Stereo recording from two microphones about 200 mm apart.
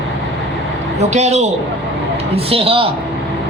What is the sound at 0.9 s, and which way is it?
A man's voice, 35° right (ahead or behind).